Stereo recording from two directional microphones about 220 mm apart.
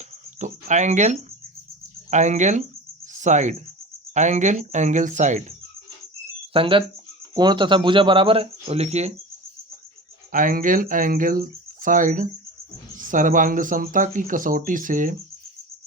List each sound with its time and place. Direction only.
0.3 s speech: 35° right (ahead or behind)
10.3 s speech: 40° right (ahead or behind)